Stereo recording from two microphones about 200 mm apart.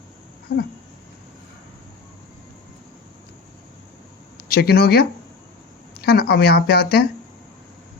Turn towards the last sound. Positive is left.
turn(degrees=50)  # may be behind; listen again after turning